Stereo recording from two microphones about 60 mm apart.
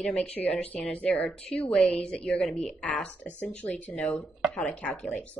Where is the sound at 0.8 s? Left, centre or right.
Centre.